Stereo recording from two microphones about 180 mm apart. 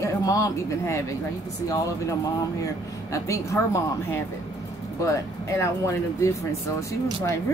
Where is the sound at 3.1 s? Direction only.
15° left (ahead or behind).